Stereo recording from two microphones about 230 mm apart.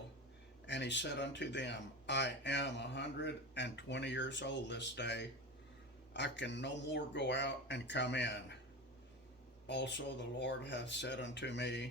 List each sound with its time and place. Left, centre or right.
0.7 s speech: left
9.6 s speech: left